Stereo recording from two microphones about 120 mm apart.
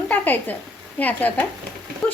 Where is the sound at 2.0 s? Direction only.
10° left (ahead or behind).